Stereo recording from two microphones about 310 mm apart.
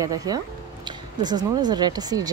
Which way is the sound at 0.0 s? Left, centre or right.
Centre.